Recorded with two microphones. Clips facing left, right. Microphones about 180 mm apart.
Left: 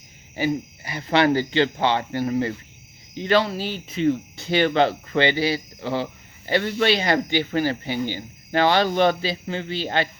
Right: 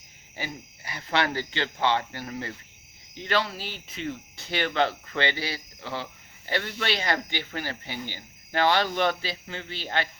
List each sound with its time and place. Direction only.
0.3 s speech: 15° left (ahead or behind)